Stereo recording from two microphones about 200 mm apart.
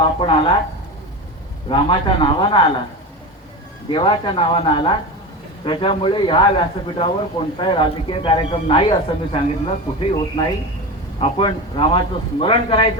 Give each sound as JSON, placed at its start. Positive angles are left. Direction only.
{"t": 0.2, "sound": "speech", "side_deg": 25}
{"t": 1.7, "sound": "speech", "side_deg": 25}
{"t": 3.8, "sound": "speech", "side_deg": 25}